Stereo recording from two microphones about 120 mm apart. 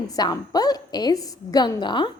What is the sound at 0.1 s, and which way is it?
A woman's voice, 35° left (ahead or behind).